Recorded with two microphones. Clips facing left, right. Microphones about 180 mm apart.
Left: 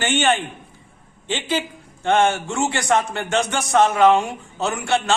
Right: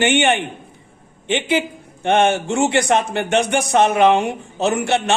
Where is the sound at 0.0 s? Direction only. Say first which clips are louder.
Right 3 dB; 20° right (ahead or behind).